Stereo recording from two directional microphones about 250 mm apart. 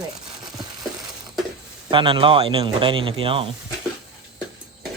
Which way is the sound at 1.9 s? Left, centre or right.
Centre.